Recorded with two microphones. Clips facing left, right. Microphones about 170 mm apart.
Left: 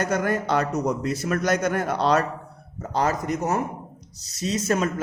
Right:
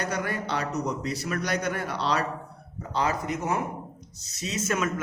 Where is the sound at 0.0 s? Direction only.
45° left (ahead or behind).